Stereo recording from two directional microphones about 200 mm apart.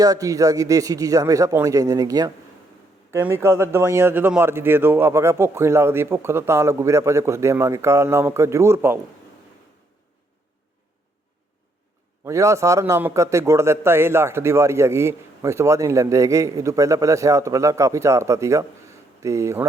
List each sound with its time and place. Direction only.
0.0 s a man's voice: 15° right (ahead or behind)
12.2 s a man's voice: 15° right (ahead or behind)